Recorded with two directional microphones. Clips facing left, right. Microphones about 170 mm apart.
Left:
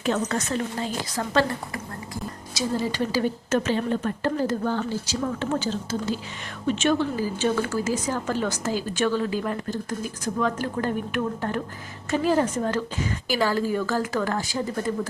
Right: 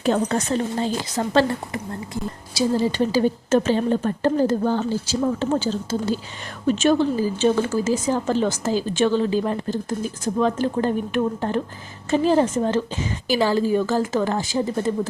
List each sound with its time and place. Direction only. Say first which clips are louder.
0.0 s a woman's voice: right 4 dB; 30° right (ahead or behind)